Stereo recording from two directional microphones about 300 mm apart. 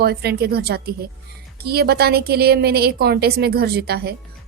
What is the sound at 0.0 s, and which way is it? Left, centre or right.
A woman's voice, right.